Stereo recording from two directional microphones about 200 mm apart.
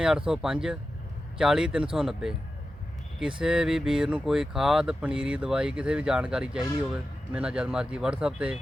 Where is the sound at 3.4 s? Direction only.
5° right (ahead or behind).